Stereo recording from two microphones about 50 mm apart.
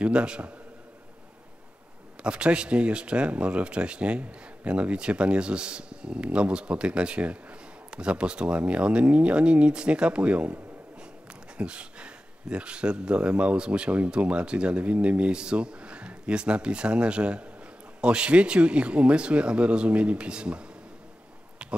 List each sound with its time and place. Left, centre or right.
0.0 s speech: right
2.2 s speech: right
21.6 s a sound: centre